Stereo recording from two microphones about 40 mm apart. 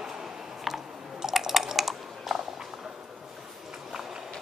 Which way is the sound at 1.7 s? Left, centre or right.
Centre.